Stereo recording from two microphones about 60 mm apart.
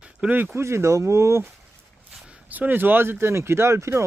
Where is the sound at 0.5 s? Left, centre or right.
Right.